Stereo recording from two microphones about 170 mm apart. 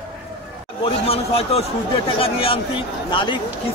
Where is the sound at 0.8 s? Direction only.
35° left (ahead or behind).